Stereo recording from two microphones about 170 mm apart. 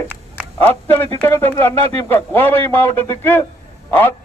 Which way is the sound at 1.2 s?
10° left (ahead or behind).